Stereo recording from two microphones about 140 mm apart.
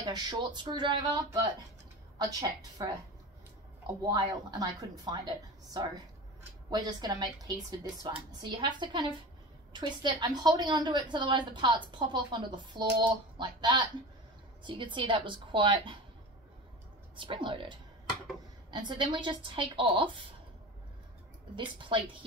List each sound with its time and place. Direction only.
0.0 s a woman's voice: 30° right (ahead or behind)
17.1 s a woman's voice: 35° right (ahead or behind)
21.5 s a woman's voice: 35° right (ahead or behind)